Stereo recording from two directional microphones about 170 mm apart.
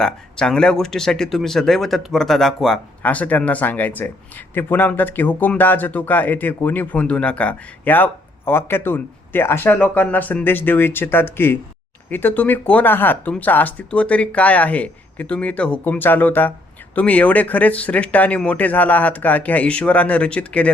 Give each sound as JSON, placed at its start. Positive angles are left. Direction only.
{"t": 0.0, "sound": "speech", "side_deg": 5}